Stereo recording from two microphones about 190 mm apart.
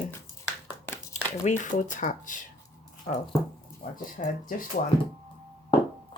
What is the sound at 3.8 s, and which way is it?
Speech, 50° left (ahead or behind).